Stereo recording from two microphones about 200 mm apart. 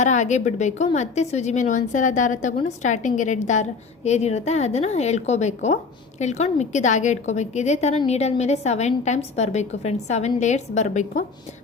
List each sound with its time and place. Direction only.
0.0 s a woman's voice: 35° left (ahead or behind)